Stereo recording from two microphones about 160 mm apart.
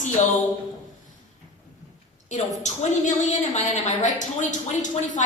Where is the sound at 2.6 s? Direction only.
50° left (ahead or behind).